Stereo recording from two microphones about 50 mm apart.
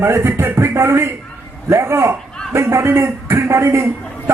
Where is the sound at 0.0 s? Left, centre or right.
Right.